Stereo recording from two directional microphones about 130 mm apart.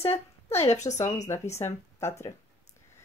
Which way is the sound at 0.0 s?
50° left (ahead or behind).